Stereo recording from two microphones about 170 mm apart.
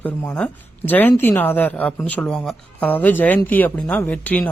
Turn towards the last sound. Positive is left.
turn(degrees=10)  # may be behind; listen again after turning